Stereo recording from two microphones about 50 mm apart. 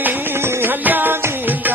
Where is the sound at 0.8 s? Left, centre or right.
Right.